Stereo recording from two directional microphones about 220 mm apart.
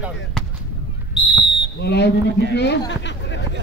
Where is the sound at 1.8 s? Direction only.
50° left (ahead or behind).